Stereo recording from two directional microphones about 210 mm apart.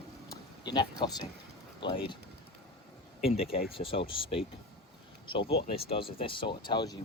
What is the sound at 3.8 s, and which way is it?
Speech, 25° left (ahead or behind).